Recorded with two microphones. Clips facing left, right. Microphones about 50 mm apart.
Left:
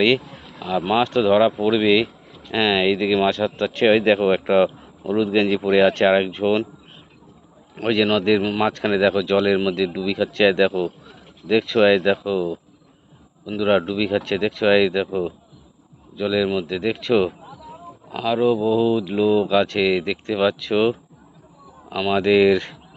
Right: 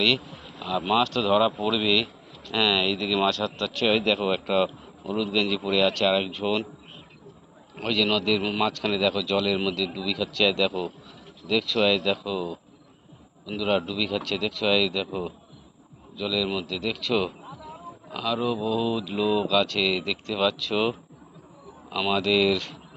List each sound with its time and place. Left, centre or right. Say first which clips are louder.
0.7 s speech: left 4 dB; left
7.9 s speech: left 6 dB; left
8.4 s speech: left 5 dB; centre
8.6 s speech: left 6 dB; left
13.6 s speech: left 7 dB; left
21.8 s speech: left 4 dB; centre
22.1 s speech: left 7 dB; left